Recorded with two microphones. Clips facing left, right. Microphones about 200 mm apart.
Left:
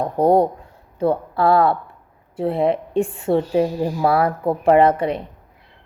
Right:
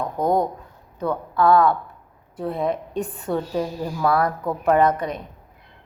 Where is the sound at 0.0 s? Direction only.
30° left (ahead or behind).